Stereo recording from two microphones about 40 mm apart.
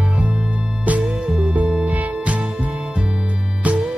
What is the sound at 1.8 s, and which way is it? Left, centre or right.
Music, right.